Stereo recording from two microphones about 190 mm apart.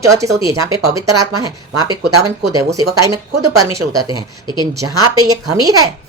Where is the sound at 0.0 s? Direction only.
15° right (ahead or behind).